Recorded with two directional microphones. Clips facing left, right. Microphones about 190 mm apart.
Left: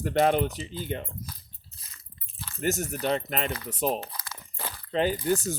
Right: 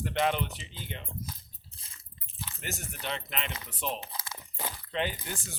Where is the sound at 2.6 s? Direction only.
45° left (ahead or behind).